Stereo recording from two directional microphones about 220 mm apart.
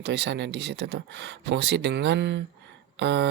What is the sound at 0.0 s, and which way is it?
Speech, 50° right (ahead or behind).